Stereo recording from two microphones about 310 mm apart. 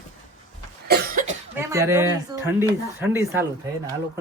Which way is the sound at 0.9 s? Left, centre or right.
Right.